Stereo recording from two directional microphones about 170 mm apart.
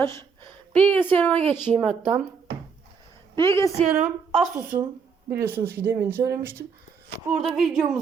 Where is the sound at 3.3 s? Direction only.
15° left (ahead or behind).